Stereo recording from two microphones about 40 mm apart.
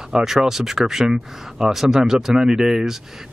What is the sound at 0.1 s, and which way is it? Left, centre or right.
Speech, centre.